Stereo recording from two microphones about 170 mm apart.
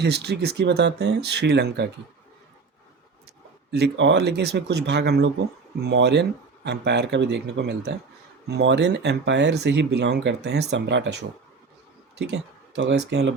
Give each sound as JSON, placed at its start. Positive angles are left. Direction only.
{"t": 0.0, "sound": "speech", "side_deg": -80}
{"t": 3.7, "sound": "speech", "side_deg": -85}
{"t": 5.8, "sound": "speech", "side_deg": -90}